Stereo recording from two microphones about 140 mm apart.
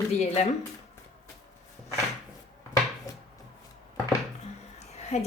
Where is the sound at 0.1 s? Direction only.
50° left (ahead or behind).